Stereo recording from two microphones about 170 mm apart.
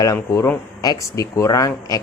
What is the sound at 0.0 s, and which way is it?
A man's voice, 15° left (ahead or behind).